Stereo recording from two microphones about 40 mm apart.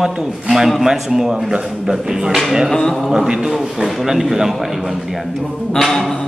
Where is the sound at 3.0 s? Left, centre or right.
Centre.